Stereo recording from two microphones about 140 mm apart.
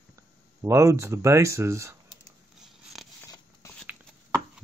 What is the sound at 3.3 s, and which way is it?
Biting, 20° left (ahead or behind).